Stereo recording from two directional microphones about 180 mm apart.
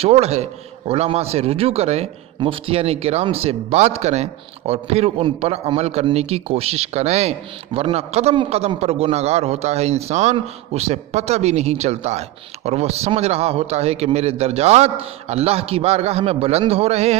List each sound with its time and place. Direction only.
0.0 s speech: 35° right (ahead or behind)